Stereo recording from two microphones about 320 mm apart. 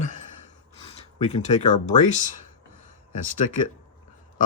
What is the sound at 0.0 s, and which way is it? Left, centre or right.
Sigh, left.